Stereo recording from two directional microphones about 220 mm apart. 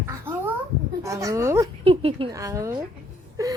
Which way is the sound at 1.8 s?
25° right (ahead or behind).